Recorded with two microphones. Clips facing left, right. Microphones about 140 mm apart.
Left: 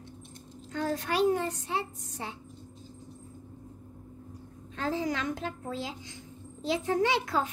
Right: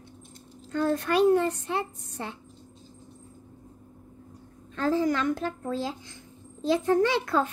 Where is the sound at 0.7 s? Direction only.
55° right (ahead or behind).